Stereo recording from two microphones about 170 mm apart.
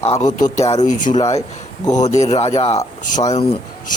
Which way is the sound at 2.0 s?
45° left (ahead or behind).